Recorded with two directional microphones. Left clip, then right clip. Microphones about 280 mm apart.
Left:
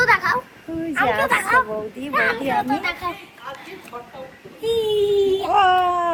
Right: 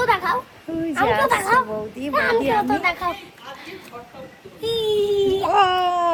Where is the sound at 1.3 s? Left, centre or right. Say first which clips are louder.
Even; right.